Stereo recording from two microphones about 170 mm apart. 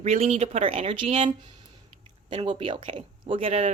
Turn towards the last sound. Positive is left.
turn(degrees=-35)  # may be behind; listen again after turning